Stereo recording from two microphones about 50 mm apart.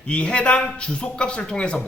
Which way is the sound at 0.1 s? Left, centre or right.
Left.